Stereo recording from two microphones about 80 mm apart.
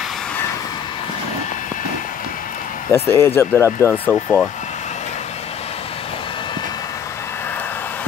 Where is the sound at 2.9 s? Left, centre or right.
Left.